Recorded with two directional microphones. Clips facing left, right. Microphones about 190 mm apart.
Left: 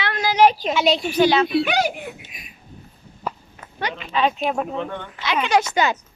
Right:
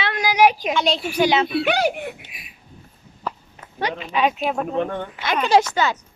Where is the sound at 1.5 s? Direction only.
55° right (ahead or behind).